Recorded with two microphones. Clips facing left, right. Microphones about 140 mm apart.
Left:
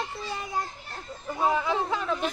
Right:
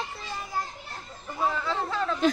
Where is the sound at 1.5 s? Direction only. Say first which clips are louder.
Left 3 dB; 15° left (ahead or behind).